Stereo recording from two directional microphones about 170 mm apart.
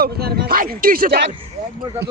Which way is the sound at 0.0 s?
65° right (ahead or behind).